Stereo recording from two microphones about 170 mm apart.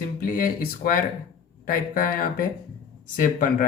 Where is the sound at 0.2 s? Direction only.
55° left (ahead or behind).